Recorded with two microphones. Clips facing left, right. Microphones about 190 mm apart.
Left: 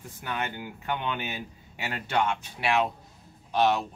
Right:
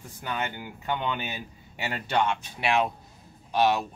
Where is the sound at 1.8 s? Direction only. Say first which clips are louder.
Right 1 dB; 20° right (ahead or behind).